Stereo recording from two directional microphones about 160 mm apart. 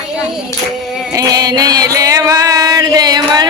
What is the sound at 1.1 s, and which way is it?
Music, 25° right (ahead or behind).